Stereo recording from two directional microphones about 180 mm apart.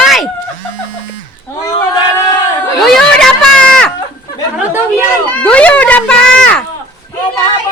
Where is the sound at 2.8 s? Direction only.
5° left (ahead or behind).